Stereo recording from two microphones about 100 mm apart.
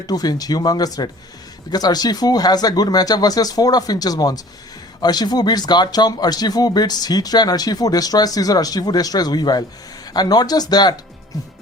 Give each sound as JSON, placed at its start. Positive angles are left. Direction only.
{"t": 0.1, "sound": "speech", "side_deg": 40}